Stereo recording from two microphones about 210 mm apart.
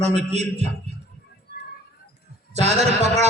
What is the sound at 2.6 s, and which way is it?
Speech, 30° right (ahead or behind).